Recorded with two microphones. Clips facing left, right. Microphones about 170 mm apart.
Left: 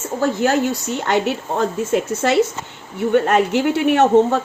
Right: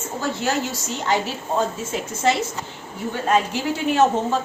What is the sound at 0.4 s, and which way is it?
A woman's voice, 60° left (ahead or behind).